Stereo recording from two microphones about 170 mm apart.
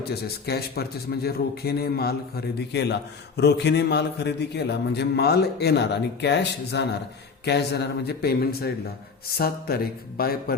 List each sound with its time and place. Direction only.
0.0 s a man's voice: 70° left (ahead or behind)